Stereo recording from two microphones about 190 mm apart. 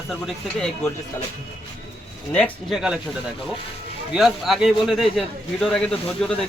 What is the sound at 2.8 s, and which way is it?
Speech, 5° right (ahead or behind).